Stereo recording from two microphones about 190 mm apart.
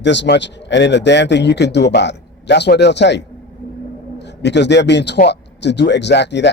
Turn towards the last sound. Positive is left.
turn(degrees=65)  # may be behind; listen again after turning